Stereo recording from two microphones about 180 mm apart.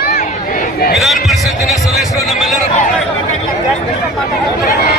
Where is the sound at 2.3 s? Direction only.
Centre (ahead or behind).